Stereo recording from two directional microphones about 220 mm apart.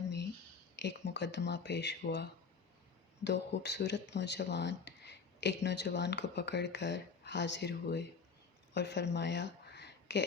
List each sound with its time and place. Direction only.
0.8 s speech: 50° left (ahead or behind)
3.2 s speech: 50° left (ahead or behind)
8.7 s a sound: 50° left (ahead or behind)